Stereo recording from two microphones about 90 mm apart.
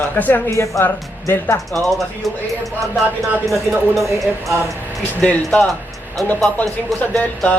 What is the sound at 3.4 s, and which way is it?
Speech, centre (ahead or behind).